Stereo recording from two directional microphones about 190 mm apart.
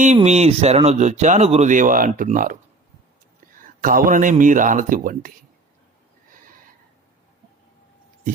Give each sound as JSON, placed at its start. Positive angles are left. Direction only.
{"t": 0.0, "sound": "speech", "side_deg": -35}
{"t": 3.8, "sound": "a man's voice", "side_deg": -45}